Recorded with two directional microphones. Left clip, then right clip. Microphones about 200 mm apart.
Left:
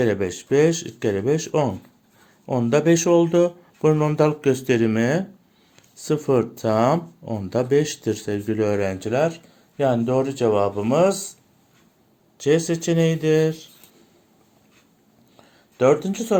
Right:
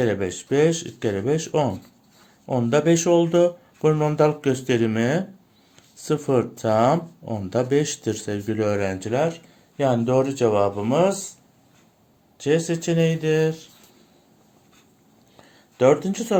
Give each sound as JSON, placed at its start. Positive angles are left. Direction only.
{"t": 0.0, "sound": "speech", "side_deg": 15}
{"t": 9.7, "sound": "speech", "side_deg": 5}
{"t": 12.4, "sound": "speech", "side_deg": 20}
{"t": 15.8, "sound": "speech", "side_deg": 5}